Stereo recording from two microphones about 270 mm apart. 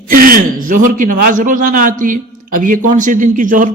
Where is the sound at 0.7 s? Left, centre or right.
Right.